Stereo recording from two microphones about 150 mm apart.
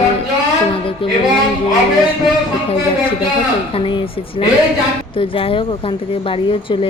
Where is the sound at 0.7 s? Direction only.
35° left (ahead or behind).